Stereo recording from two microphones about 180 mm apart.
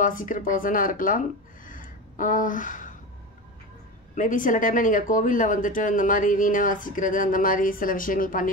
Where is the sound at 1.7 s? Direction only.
45° left (ahead or behind).